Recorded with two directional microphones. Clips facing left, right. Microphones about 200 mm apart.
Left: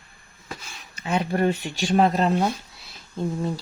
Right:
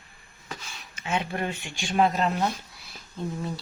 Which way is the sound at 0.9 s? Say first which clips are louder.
Left 5 dB; 40° left (ahead or behind).